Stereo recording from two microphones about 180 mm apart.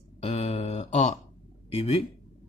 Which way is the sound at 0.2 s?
40° left (ahead or behind).